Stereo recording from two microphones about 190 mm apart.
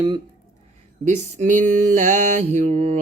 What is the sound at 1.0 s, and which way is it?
Mantra, 40° right (ahead or behind).